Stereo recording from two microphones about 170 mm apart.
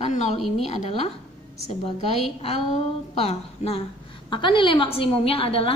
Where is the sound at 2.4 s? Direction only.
35° left (ahead or behind).